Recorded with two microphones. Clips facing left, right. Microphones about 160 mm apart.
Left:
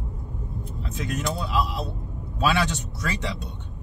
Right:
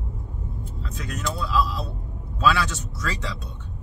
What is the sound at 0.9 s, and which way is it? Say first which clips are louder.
Speech: left 2 dB; 20° left (ahead or behind).